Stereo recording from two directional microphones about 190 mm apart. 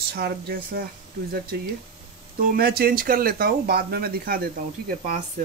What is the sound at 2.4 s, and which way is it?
Speech, 50° right (ahead or behind).